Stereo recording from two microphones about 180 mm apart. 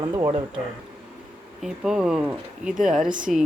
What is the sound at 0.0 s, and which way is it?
Speech, 25° right (ahead or behind).